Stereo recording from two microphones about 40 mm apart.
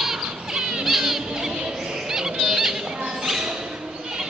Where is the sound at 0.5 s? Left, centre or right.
Centre.